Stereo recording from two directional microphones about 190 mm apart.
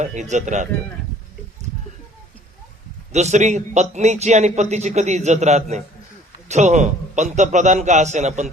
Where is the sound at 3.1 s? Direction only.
35° right (ahead or behind).